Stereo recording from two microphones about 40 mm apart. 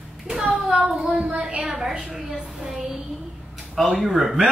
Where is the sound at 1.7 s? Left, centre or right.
Centre.